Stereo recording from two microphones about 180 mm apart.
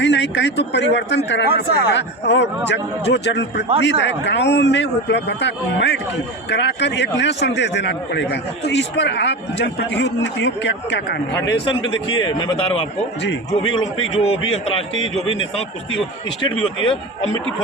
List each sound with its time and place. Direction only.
0.0 s a man's voice: 80° left
11.4 s a man's voice: 85° left
12.0 s a man's voice: 25° left (ahead or behind)
14.9 s a man's voice: 90° left